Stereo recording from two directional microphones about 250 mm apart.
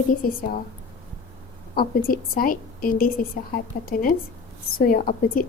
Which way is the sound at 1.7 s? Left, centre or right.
Left.